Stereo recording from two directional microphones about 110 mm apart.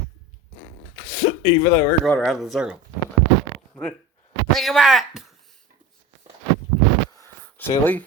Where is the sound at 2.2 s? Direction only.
Centre (ahead or behind).